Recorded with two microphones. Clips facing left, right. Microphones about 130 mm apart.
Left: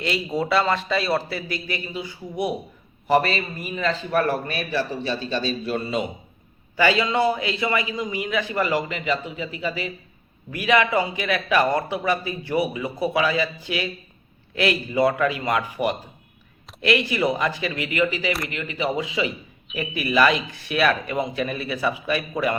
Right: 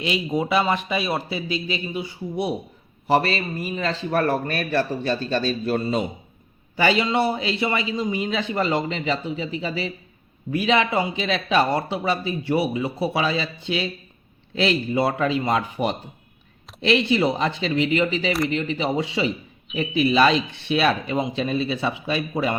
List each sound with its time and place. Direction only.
0.0 s a man's voice: 15° right (ahead or behind)
3.1 s a man's voice: 35° right (ahead or behind)
6.7 s a man's voice: 25° right (ahead or behind)